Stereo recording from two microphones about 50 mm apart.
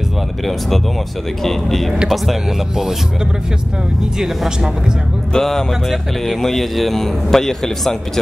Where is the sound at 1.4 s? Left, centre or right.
Centre.